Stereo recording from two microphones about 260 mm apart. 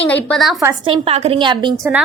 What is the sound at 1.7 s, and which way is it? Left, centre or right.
Speech, centre.